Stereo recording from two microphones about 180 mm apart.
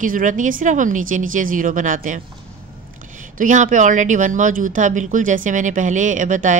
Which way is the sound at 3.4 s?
45° right (ahead or behind).